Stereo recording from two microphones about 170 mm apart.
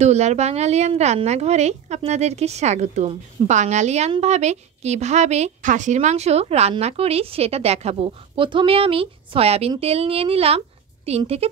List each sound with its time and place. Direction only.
0.0 s a woman's voice: 40° right (ahead or behind)